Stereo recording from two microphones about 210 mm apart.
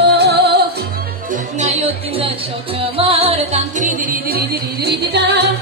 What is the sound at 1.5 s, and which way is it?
Music, 30° right (ahead or behind).